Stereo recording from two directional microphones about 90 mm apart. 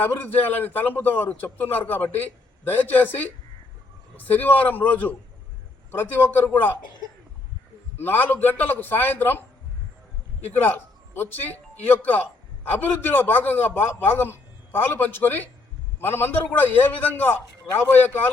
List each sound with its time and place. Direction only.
0.0 s speech: 20° left (ahead or behind)
7.9 s speech: 25° left (ahead or behind)
10.5 s speech: 20° left (ahead or behind)